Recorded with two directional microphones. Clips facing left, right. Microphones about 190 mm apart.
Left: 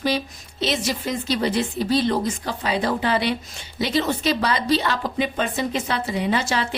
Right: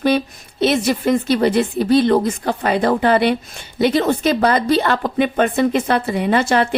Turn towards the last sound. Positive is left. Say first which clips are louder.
# right 7 dB
turn(degrees=-55)  # may be behind; listen again after turning